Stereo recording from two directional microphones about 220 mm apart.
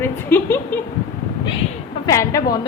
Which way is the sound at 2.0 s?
15° left (ahead or behind).